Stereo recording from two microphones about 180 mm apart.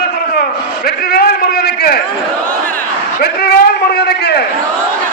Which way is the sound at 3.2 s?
60° left (ahead or behind).